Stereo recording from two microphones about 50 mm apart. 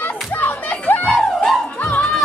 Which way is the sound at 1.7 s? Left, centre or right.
Left.